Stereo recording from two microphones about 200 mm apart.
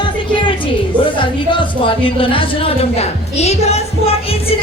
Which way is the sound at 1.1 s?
25° left (ahead or behind).